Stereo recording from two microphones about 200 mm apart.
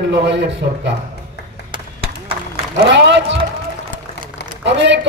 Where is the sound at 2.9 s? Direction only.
60° right (ahead or behind).